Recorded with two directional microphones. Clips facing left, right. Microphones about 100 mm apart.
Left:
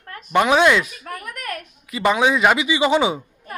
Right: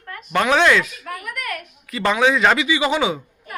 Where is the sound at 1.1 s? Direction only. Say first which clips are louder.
Right 1 dB; 40° left (ahead or behind).